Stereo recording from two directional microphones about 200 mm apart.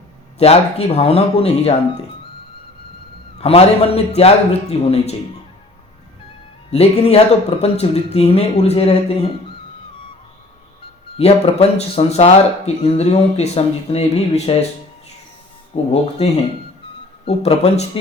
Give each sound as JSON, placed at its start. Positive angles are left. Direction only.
{"t": 0.3, "sound": "speech", "side_deg": 30}
{"t": 3.3, "sound": "speech", "side_deg": 30}
{"t": 6.7, "sound": "speech", "side_deg": 30}
{"t": 11.2, "sound": "speech", "side_deg": 30}
{"t": 15.7, "sound": "speech", "side_deg": 35}